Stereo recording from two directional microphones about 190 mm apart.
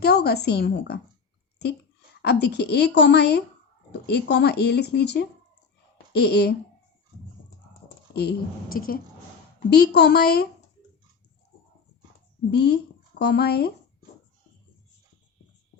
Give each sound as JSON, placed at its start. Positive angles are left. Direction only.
{"t": 0.0, "sound": "a woman's voice", "side_deg": 60}
{"t": 2.2, "sound": "speech", "side_deg": 60}
{"t": 8.1, "sound": "speech", "side_deg": 60}
{"t": 12.5, "sound": "speech", "side_deg": 60}